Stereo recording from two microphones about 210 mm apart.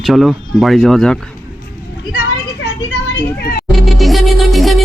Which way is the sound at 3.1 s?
50° left (ahead or behind).